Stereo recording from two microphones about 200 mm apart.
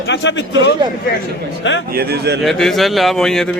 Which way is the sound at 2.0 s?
50° right (ahead or behind).